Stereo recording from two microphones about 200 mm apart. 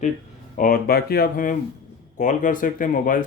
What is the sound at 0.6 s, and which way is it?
Speech, 45° left (ahead or behind).